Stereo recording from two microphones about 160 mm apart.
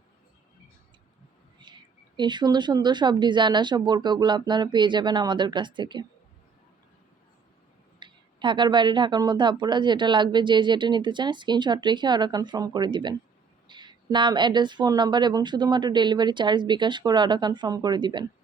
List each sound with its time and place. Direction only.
2.1 s speech: 30° right (ahead or behind)
7.9 s speech: 30° right (ahead or behind)